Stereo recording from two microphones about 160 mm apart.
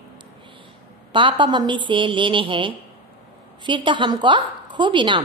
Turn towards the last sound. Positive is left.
turn(degrees=-30)  # may be behind; listen again after turning